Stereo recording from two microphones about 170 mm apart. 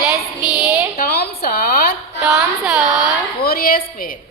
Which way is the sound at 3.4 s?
60° left (ahead or behind).